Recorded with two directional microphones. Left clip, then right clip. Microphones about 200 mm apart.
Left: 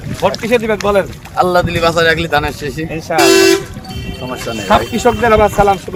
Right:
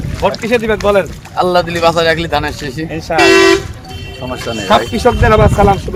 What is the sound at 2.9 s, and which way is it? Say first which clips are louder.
Speech: right 1 dB; 10° left (ahead or behind).